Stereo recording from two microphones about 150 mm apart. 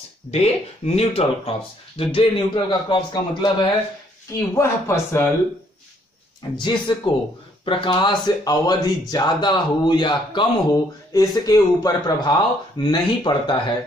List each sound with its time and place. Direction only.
0.3 s speech: 45° left (ahead or behind)
4.4 s speech: 20° left (ahead or behind)
6.5 s speech: 30° left (ahead or behind)